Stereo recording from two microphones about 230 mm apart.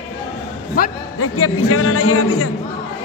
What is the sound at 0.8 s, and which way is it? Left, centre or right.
Speech, left.